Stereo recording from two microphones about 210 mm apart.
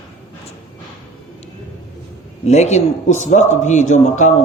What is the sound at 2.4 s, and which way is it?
A man's voice, 30° left (ahead or behind).